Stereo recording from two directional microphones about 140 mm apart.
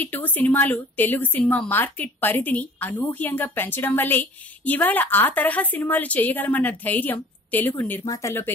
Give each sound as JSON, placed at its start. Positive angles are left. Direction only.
{"t": 0.0, "sound": "a woman's voice", "side_deg": 10}
{"t": 8.0, "sound": "speech", "side_deg": 25}